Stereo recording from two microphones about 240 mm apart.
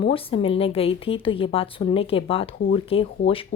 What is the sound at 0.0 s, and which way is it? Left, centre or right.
A woman's voice, left.